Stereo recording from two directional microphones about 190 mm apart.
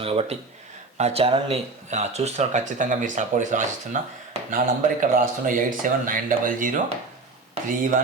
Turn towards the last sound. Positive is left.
turn(degrees=-45)  # may be behind; listen again after turning